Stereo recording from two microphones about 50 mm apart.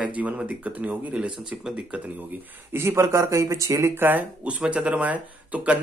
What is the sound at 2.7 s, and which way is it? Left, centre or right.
Speech, right.